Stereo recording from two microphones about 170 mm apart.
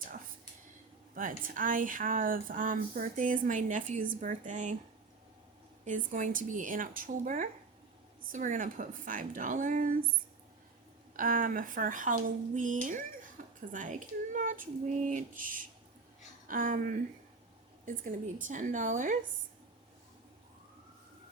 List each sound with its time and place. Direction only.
1.1 s speech: 55° right (ahead or behind)
5.8 s speech: 45° right (ahead or behind)
11.2 s speech: 55° right (ahead or behind)